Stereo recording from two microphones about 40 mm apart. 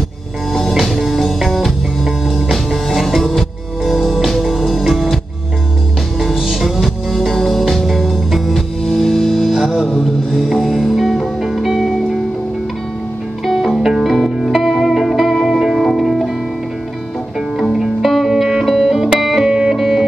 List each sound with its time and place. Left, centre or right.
0.7 s music: centre
6.6 s music: centre
13.5 s music: centre
17.6 s music: centre
18.3 s music: centre
19.5 s music: centre